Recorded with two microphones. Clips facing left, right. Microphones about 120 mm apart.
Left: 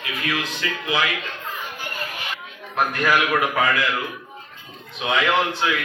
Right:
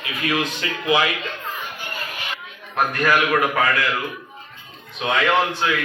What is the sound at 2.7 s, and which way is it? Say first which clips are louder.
A man's voice: right 1 dB; 10° left (ahead or behind).